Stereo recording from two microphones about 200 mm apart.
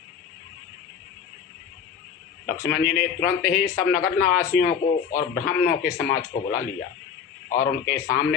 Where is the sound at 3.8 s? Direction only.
15° left (ahead or behind).